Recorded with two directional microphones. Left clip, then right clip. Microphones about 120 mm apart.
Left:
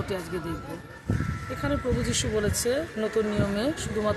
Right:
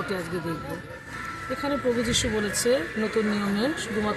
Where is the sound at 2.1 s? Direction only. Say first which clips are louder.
Right 1 dB; 25° left (ahead or behind).